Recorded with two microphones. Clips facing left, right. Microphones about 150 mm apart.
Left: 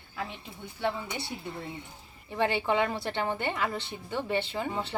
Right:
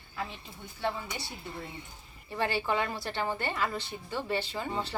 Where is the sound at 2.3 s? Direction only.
20° left (ahead or behind).